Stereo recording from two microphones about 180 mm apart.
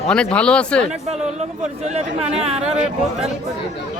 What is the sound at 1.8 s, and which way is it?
Speech, 35° right (ahead or behind).